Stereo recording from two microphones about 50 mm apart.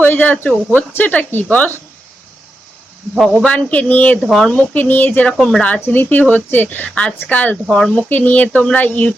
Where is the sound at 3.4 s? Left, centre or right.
Left.